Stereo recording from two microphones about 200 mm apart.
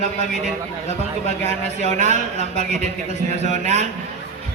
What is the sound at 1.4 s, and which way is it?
A man's voice, 35° right (ahead or behind).